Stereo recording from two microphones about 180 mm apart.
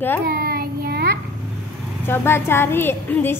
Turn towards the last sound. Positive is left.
turn(degrees=10)  # may be behind; listen again after turning